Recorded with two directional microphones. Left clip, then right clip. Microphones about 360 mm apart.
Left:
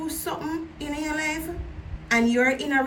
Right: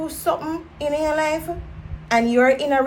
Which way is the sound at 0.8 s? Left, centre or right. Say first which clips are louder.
Right 10 dB; centre.